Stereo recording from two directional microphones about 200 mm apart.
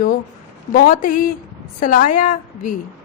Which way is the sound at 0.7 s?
45° left (ahead or behind).